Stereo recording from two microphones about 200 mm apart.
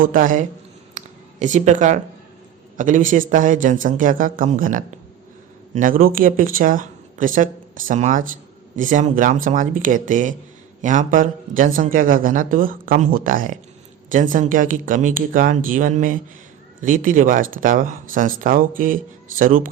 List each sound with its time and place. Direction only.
0.0 s speech: 45° right (ahead or behind)
0.9 s a sound: 35° right (ahead or behind)
2.7 s speech: 40° right (ahead or behind)